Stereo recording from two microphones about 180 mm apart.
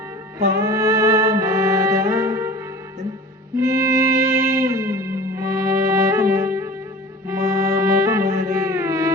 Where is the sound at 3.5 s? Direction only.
15° right (ahead or behind).